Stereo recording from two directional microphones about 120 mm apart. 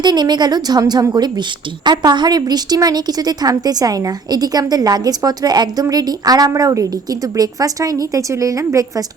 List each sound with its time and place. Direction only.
0.0 s a woman's voice: 35° right (ahead or behind)